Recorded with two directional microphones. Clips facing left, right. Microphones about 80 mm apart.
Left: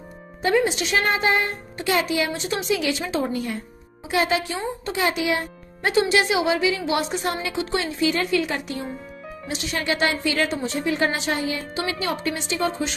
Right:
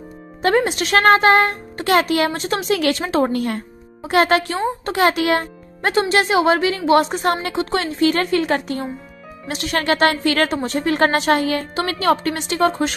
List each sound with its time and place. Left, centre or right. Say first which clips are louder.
0.4 s a woman's voice: right 3 dB; right